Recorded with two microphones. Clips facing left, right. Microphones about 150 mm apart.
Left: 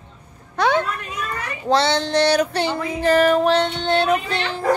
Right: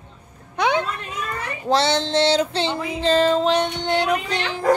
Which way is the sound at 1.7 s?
25° right (ahead or behind).